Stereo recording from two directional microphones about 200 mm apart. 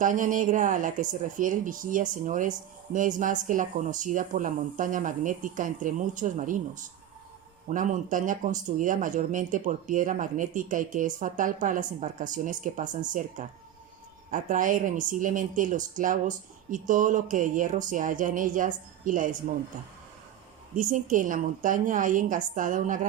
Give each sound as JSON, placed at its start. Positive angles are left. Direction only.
{"t": 0.0, "sound": "speech", "side_deg": -40}
{"t": 20.7, "sound": "speech", "side_deg": -40}